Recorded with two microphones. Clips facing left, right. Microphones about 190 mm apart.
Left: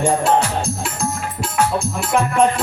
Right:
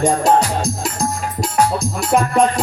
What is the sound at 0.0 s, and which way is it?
Music, 40° right (ahead or behind).